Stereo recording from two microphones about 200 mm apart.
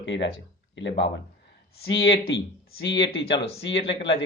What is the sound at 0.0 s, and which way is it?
Speech, 65° left (ahead or behind).